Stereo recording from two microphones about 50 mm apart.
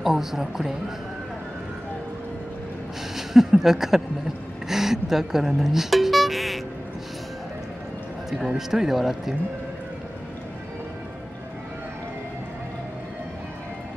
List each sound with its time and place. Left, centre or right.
0.0 s a woman's voice: centre
3.2 s speech: centre
8.5 s a woman's voice: centre